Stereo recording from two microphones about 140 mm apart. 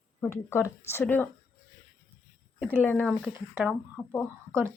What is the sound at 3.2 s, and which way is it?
Speech, 5° right (ahead or behind).